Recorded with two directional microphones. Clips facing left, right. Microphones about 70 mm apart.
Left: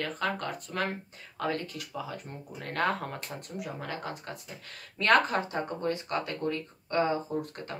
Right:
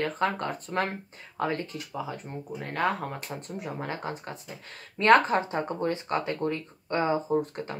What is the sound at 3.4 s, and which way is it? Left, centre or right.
Speech, right.